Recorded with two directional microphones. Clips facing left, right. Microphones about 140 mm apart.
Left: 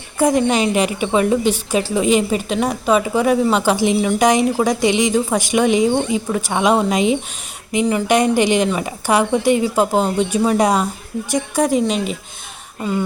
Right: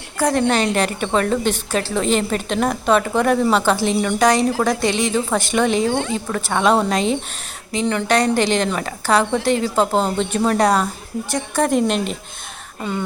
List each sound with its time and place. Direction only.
0.2 s a woman's voice: 20° left (ahead or behind)
0.4 s a woman's voice: 10° left (ahead or behind)
11.8 s speech: centre (ahead or behind)